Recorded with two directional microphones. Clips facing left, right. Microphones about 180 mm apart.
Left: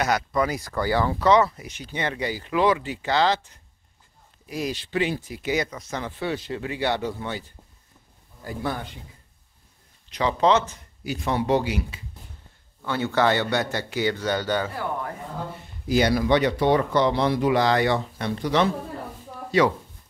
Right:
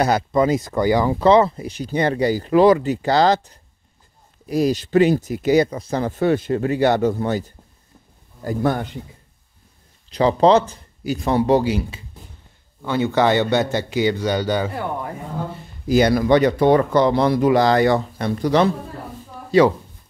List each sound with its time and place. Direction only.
0.0 s speech: 25° right (ahead or behind)
1.2 s speech: 30° right (ahead or behind)
10.0 s speech: 35° right (ahead or behind)
12.8 s a man's voice: 15° right (ahead or behind)
15.9 s speech: 50° right (ahead or behind)